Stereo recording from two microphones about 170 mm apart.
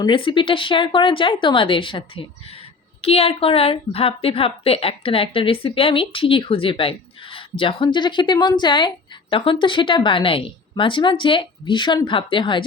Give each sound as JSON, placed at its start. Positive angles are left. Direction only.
{"t": 0.0, "sound": "a woman's voice", "side_deg": 30}